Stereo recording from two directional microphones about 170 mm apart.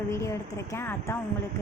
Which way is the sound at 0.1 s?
15° left (ahead or behind).